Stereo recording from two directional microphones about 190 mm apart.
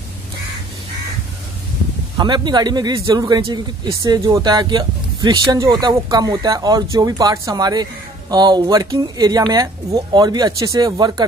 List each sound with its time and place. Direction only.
2.1 s speech: 25° right (ahead or behind)